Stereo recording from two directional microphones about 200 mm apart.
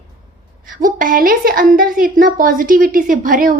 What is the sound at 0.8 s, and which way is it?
A woman's voice, 45° right (ahead or behind).